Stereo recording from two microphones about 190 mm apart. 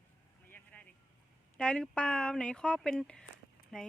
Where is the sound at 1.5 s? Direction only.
5° left (ahead or behind).